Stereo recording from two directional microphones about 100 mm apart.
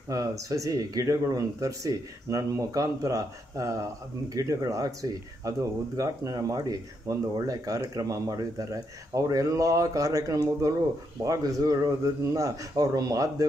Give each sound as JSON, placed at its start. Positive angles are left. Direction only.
{"t": 0.1, "sound": "speech", "side_deg": -35}